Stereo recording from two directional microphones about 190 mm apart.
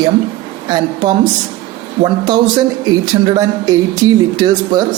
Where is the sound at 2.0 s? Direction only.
25° right (ahead or behind).